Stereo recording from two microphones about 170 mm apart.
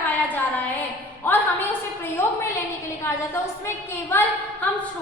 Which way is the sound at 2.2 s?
15° left (ahead or behind).